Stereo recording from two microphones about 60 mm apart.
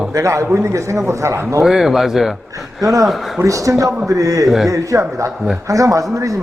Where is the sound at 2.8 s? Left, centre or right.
Right.